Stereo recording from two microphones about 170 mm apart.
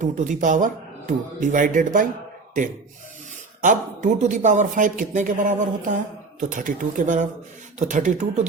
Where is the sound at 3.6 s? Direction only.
50° right (ahead or behind).